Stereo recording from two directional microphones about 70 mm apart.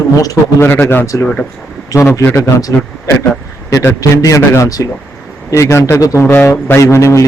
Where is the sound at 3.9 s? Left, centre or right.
Left.